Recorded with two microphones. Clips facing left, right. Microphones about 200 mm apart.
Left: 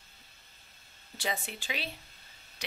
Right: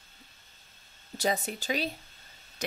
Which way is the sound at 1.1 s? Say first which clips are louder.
Right 6 dB; 40° right (ahead or behind).